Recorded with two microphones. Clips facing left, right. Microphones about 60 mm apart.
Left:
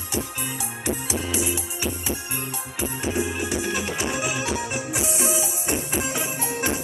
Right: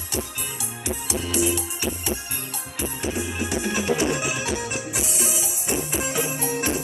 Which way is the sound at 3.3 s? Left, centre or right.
Centre.